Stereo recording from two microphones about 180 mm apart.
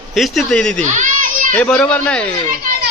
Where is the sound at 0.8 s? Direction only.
45° right (ahead or behind).